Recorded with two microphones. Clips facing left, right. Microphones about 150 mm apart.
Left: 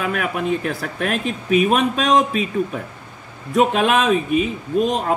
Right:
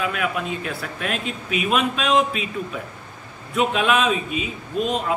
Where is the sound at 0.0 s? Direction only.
50° left (ahead or behind).